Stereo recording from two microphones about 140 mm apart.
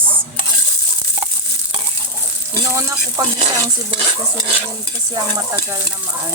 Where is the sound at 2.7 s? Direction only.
25° right (ahead or behind).